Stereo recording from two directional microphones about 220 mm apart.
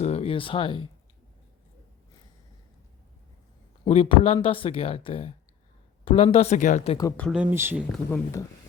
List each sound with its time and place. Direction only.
0.0 s a sound: 30° left (ahead or behind)
3.8 s speech: 25° left (ahead or behind)
7.2 s speech: centre (ahead or behind)
8.1 s speech: 15° left (ahead or behind)